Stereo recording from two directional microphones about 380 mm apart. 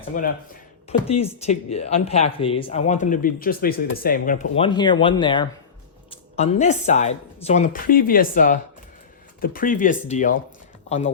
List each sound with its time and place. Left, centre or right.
0.2 s speech: centre